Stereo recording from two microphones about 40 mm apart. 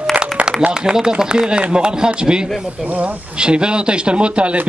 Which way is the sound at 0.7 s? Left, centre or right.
Centre.